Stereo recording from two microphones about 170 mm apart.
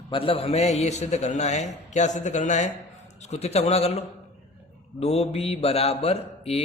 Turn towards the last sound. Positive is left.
turn(degrees=35)  # may be behind; listen again after turning